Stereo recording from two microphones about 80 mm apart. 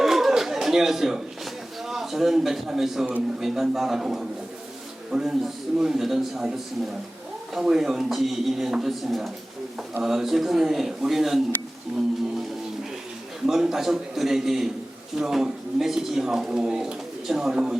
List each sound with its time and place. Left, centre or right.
0.0 s a sound: centre
1.9 s a man's voice: centre
7.5 s a man's voice: centre
13.5 s a man's voice: centre